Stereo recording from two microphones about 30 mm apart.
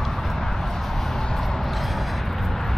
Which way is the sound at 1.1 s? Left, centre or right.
Centre.